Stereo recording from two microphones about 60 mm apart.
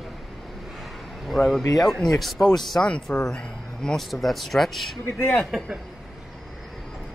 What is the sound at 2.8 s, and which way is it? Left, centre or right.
Speech, left.